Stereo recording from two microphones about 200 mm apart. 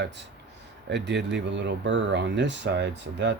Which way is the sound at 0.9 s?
60° right (ahead or behind).